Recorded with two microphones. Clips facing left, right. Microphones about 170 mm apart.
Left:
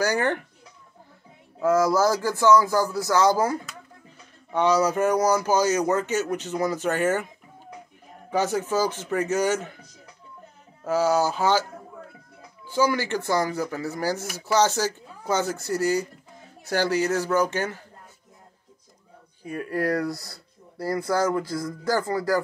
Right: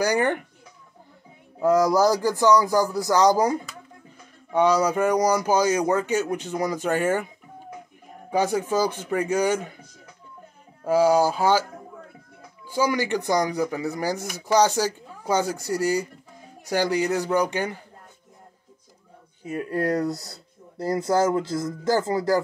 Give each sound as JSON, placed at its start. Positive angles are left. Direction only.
{"t": 0.0, "sound": "speech", "side_deg": -15}
{"t": 1.6, "sound": "speech", "side_deg": -15}
{"t": 8.3, "sound": "speech", "side_deg": -15}
{"t": 10.8, "sound": "speech", "side_deg": -10}
{"t": 12.6, "sound": "speech", "side_deg": -10}
{"t": 19.4, "sound": "speech", "side_deg": -25}